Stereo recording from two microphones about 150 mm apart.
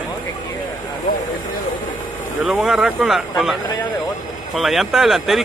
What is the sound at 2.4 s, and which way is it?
Speech, centre (ahead or behind).